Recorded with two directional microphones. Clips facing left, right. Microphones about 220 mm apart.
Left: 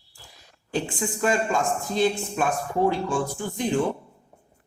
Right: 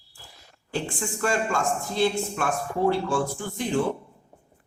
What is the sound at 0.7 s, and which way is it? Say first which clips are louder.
Speech: left 2 dB; 15° left (ahead or behind).